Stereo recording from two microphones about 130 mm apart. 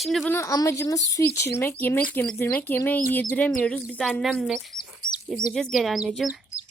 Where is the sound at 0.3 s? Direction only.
20° left (ahead or behind); by 6.3 s 5° right (ahead or behind).